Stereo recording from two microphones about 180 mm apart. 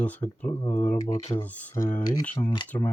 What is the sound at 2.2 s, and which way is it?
Speech, 45° left (ahead or behind).